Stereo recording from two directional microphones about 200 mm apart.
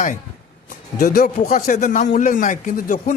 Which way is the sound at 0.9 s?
45° left (ahead or behind).